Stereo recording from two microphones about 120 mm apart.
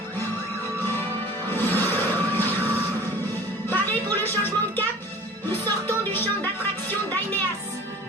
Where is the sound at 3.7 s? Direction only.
15° left (ahead or behind).